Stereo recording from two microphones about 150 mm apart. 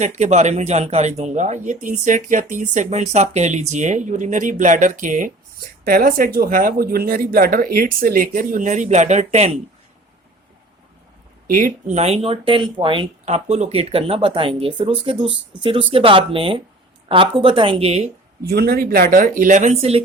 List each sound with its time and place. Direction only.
0.0 s speech: 50° right (ahead or behind)
5.8 s speech: 75° right (ahead or behind); by 9.6 s 50° right (ahead or behind)
11.4 s speech: 70° right (ahead or behind)
11.9 s speech: 45° right (ahead or behind)
13.2 s speech: 45° right (ahead or behind)
18.4 s speech: 90° right; by 20.0 s 45° right (ahead or behind)